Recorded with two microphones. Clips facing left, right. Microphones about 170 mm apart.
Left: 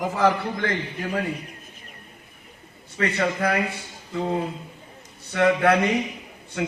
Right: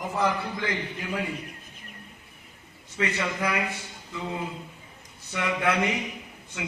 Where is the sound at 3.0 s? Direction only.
60° left (ahead or behind).